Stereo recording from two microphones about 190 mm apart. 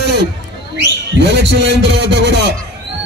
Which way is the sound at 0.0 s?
65° right (ahead or behind).